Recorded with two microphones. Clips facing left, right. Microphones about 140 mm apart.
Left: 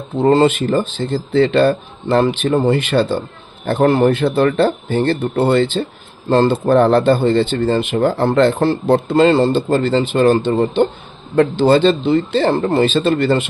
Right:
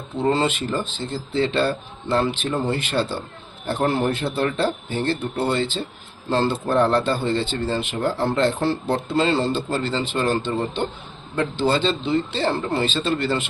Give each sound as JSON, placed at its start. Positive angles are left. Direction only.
{"t": 0.2, "sound": "speech", "side_deg": 50}